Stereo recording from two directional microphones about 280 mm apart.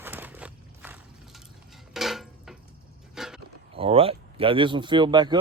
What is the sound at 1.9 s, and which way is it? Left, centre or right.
Dishes, centre.